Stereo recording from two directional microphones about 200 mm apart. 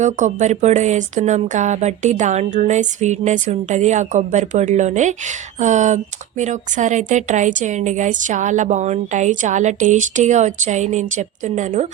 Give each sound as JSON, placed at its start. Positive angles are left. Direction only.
{"t": 0.0, "sound": "a woman's voice", "side_deg": -40}